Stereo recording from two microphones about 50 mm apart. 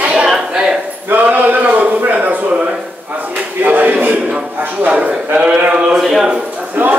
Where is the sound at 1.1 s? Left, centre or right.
Right.